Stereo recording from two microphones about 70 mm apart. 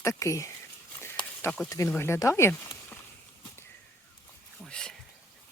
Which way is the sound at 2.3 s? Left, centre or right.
Left.